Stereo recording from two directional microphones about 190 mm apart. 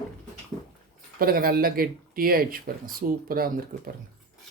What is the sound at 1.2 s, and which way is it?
Speech, 50° right (ahead or behind).